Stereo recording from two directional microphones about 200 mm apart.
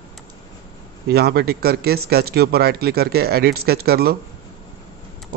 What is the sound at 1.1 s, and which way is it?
Speech, 55° right (ahead or behind).